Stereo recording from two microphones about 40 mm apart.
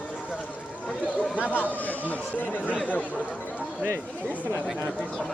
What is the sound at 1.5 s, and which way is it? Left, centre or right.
Speech, left.